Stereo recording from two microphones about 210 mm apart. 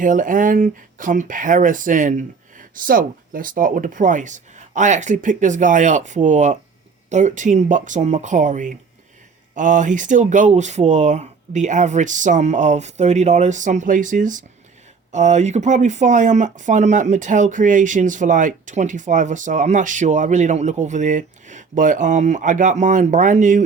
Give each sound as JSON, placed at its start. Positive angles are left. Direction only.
{"t": 0.0, "sound": "speech", "side_deg": -40}